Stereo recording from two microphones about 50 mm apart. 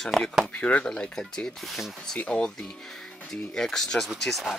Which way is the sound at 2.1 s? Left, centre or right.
Left.